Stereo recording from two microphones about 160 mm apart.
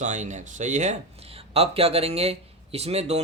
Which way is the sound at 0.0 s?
50° right (ahead or behind).